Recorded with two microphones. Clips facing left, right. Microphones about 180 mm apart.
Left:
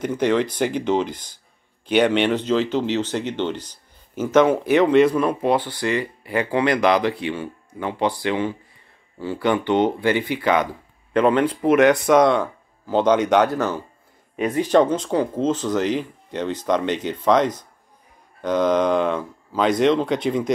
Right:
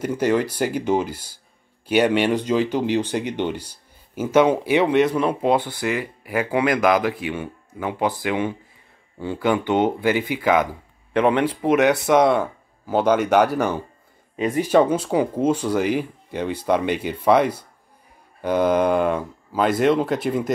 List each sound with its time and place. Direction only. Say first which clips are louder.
0.0 s speech: even; 10° right (ahead or behind)